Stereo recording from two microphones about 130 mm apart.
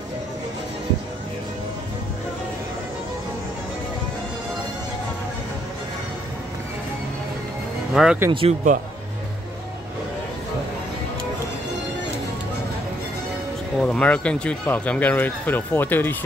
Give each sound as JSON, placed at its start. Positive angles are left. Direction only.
{"t": 7.9, "sound": "speech", "side_deg": -5}
{"t": 8.3, "sound": "speech", "side_deg": -40}
{"t": 13.7, "sound": "speech", "side_deg": 10}